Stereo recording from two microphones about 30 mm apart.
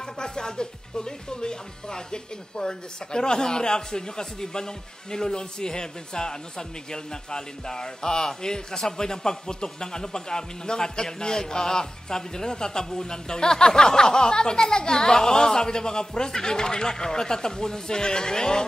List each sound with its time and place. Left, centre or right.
0.0 s speech: left